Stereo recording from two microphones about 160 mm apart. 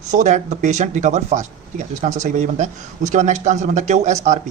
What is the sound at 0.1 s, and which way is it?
A man's voice, 50° right (ahead or behind).